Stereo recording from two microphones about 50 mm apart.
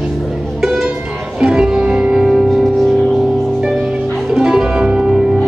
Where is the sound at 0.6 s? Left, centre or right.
Centre.